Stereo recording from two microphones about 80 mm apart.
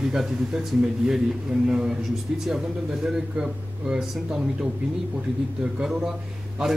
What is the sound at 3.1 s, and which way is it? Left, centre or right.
Speech, centre.